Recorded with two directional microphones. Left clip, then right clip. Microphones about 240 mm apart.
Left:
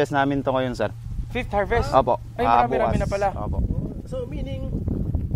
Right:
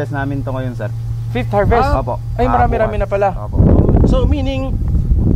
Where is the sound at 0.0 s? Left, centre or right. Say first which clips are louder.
Left 1 dB; left.